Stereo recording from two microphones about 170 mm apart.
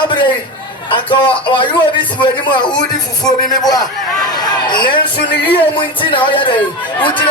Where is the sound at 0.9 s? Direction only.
30° left (ahead or behind).